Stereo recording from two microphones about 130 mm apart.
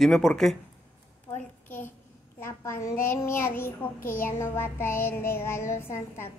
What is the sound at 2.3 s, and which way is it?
Speech, 20° left (ahead or behind).